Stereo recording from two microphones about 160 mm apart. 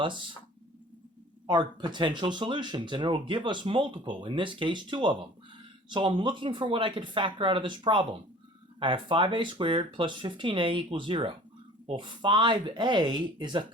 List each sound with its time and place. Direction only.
1.5 s speech: 25° right (ahead or behind)